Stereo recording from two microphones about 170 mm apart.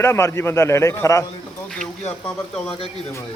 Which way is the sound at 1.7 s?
5° left (ahead or behind).